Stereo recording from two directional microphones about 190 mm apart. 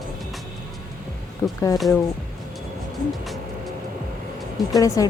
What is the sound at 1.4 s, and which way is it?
Speech, 15° left (ahead or behind).